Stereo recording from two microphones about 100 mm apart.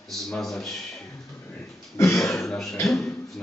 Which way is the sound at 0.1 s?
5° left (ahead or behind).